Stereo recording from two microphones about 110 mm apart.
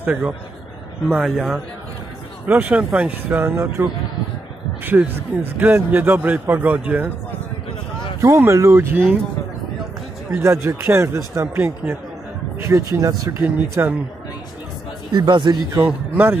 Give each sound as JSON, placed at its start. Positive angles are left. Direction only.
{"t": 0.0, "sound": "a man's voice", "side_deg": -15}
{"t": 1.1, "sound": "a man's voice", "side_deg": -5}
{"t": 2.4, "sound": "a man's voice", "side_deg": -15}
{"t": 4.8, "sound": "a man's voice", "side_deg": -15}
{"t": 8.2, "sound": "speech", "side_deg": -25}
{"t": 10.4, "sound": "a man's voice", "side_deg": -25}
{"t": 15.1, "sound": "speech", "side_deg": -45}
{"t": 15.8, "sound": "a man's voice", "side_deg": -20}